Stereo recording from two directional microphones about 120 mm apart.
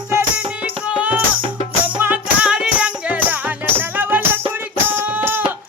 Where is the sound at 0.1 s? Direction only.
15° right (ahead or behind).